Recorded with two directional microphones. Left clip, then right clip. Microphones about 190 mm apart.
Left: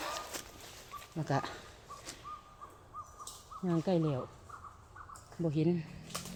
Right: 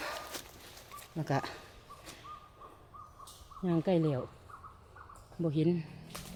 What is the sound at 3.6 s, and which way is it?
Speech, 20° right (ahead or behind).